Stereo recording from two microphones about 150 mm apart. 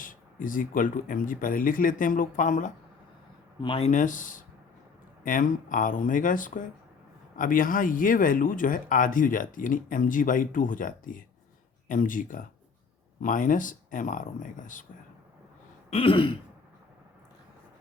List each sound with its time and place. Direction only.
0.0 s speech: 65° left (ahead or behind)
3.6 s speech: 40° left (ahead or behind); by 14.8 s 60° left (ahead or behind)
15.9 s throat clearing: 35° left (ahead or behind)